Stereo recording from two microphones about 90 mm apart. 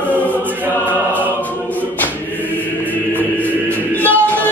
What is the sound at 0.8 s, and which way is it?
Music, 20° left (ahead or behind).